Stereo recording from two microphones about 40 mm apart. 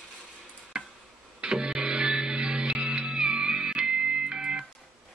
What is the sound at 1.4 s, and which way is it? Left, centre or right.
Music, right.